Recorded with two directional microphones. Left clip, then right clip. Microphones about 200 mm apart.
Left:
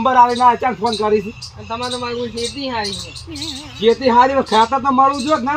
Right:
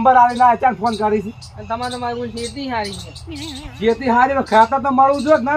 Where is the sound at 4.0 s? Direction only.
15° right (ahead or behind).